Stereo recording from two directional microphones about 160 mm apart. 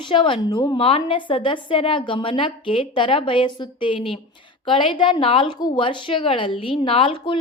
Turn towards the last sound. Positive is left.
turn(degrees=30)  # may be behind; listen again after turning